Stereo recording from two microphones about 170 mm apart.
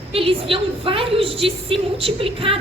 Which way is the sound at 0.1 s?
35° right (ahead or behind).